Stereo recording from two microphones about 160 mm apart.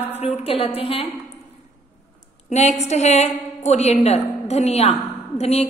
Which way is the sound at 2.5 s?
45° left (ahead or behind).